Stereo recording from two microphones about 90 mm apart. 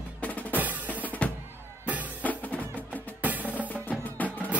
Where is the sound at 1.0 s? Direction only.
15° left (ahead or behind).